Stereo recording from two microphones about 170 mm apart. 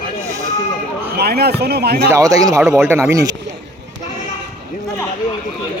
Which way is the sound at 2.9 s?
15° right (ahead or behind).